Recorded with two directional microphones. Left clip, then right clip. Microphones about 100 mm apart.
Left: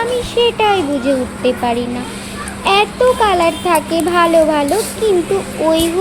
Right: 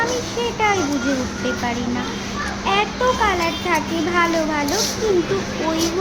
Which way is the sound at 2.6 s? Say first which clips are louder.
Left 8 dB; 45° left (ahead or behind).